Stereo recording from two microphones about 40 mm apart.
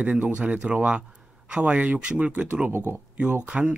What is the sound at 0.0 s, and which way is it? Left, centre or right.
Speech, right.